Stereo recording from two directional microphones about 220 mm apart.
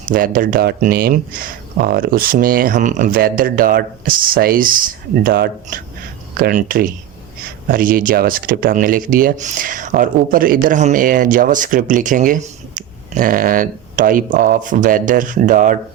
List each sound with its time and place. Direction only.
0.1 s speech: 40° right (ahead or behind)